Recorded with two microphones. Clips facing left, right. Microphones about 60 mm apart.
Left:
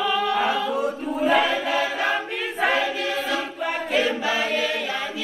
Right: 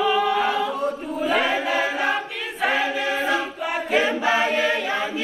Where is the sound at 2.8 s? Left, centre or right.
Centre.